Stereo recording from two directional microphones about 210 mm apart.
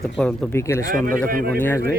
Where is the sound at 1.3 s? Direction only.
45° right (ahead or behind).